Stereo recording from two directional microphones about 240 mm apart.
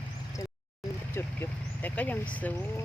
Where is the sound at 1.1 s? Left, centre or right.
Centre.